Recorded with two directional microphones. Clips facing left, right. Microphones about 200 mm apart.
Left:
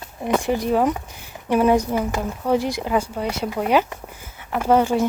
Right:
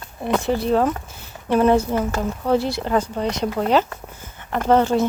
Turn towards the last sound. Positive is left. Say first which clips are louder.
# right 1 dB
turn(degrees=10)  # may be behind; listen again after turning